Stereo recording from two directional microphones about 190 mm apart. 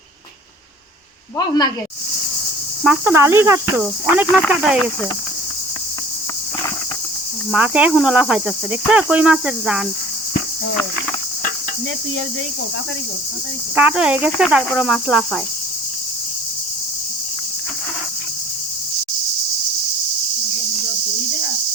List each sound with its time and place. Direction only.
1.4 s speech: 20° left (ahead or behind)
2.8 s speech: 10° right (ahead or behind)
4.4 s cricket: centre (ahead or behind)
7.5 s cricket: 5° right (ahead or behind)
13.7 s cricket: 5° right (ahead or behind)